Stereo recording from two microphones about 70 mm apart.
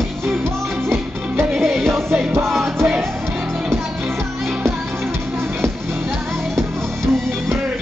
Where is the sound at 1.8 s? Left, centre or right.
Right.